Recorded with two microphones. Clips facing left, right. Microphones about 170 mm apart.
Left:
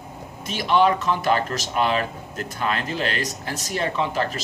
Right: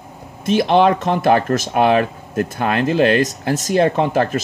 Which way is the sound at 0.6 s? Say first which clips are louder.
Right 5 dB; 55° right (ahead or behind).